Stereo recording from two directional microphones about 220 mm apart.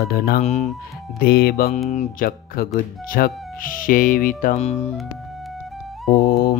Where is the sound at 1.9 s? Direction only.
35° left (ahead or behind).